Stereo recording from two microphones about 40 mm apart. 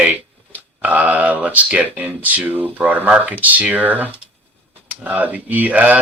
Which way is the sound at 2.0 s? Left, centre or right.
Right.